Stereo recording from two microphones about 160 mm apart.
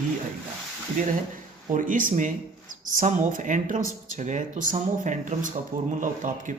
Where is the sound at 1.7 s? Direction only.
55° right (ahead or behind).